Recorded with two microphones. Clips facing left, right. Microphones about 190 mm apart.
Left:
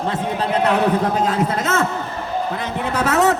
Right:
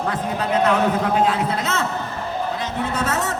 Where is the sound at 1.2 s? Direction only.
45° left (ahead or behind).